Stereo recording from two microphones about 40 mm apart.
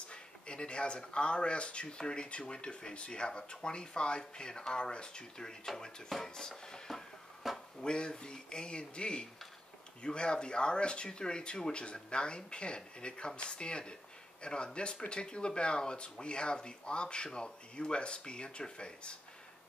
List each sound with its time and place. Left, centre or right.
0.1 s speech: left
7.4 s a sound: centre
7.8 s speech: left